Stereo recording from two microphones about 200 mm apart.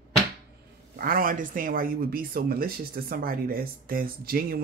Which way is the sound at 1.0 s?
45° right (ahead or behind).